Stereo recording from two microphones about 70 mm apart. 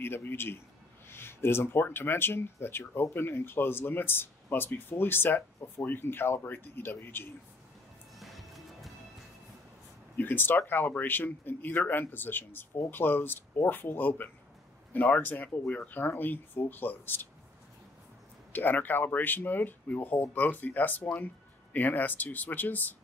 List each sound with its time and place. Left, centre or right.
0.0 s speech: left
8.2 s music: centre
10.1 s speech: left
18.5 s speech: left